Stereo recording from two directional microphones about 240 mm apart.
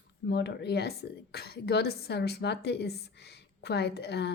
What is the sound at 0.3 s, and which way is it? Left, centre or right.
A woman's voice, left.